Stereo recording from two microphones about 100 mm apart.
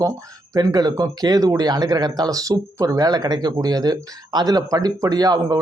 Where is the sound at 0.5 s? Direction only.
40° right (ahead or behind).